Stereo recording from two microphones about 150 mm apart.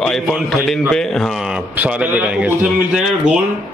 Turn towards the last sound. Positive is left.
turn(degrees=-10)  # may be behind; listen again after turning